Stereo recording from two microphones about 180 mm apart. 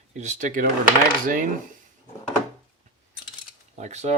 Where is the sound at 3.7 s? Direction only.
40° right (ahead or behind).